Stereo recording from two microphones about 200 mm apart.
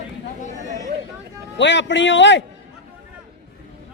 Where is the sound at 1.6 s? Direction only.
65° left (ahead or behind).